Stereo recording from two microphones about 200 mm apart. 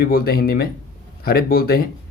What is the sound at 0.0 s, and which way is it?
Speech, 50° left (ahead or behind).